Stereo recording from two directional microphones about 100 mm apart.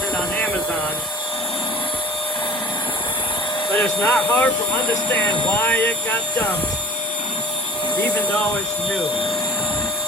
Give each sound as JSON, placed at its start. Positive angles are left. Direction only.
{"t": 3.8, "sound": "speech", "side_deg": 15}
{"t": 5.5, "sound": "speech", "side_deg": 15}